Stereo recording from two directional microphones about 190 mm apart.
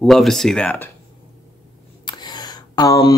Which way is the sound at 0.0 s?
Centre (ahead or behind).